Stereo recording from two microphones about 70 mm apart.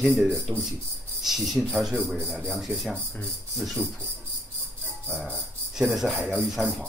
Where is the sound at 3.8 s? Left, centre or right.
Right.